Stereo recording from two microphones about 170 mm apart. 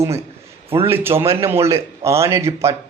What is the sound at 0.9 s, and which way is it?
Speech, 15° right (ahead or behind).